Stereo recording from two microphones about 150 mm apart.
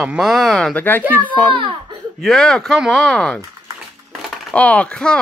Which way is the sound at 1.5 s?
35° right (ahead or behind).